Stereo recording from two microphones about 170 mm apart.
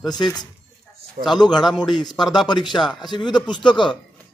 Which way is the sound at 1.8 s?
25° left (ahead or behind).